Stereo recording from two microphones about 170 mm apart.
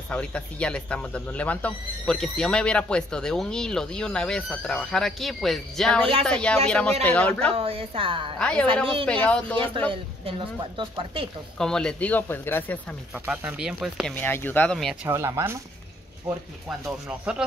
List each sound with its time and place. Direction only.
0.1 s speech: 5° left (ahead or behind)
7.5 s a woman's voice: 35° right (ahead or behind)
8.4 s speech: 5° left (ahead or behind)
9.6 s a woman's voice: 30° right (ahead or behind)
11.5 s speech: 5° left (ahead or behind)
13.3 s speech: 10° right (ahead or behind)
14.1 s speech: 10° left (ahead or behind)
15.0 s speech: 15° right (ahead or behind)
16.8 s speech: 10° right (ahead or behind)